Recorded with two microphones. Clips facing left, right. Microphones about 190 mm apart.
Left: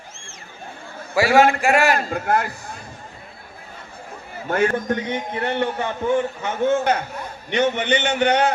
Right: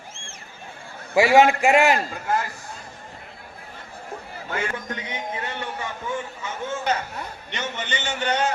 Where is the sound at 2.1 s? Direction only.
60° left (ahead or behind).